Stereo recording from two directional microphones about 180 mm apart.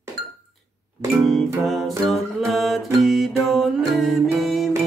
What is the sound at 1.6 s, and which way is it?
Music, centre (ahead or behind).